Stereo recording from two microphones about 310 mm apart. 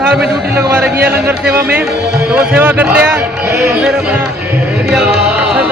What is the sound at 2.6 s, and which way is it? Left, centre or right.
Speech, centre.